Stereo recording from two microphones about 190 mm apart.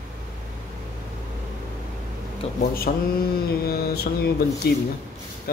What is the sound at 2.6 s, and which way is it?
Mantra, 50° left (ahead or behind).